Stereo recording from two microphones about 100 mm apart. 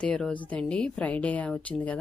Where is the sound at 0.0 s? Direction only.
10° left (ahead or behind).